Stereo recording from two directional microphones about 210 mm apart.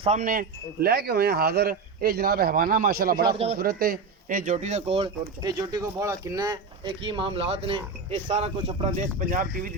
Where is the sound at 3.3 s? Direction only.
30° right (ahead or behind).